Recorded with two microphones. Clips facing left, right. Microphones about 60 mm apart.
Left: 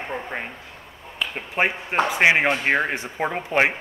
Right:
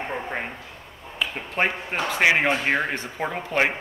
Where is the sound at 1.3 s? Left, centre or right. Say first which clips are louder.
Left 2 dB; centre.